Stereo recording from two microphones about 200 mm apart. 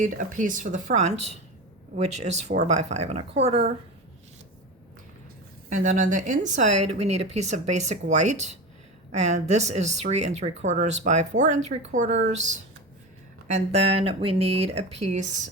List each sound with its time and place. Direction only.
0.0 s speech: 40° right (ahead or behind)
5.6 s speech: 40° right (ahead or behind)